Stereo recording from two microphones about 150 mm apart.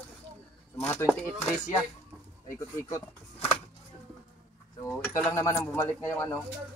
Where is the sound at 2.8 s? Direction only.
20° left (ahead or behind).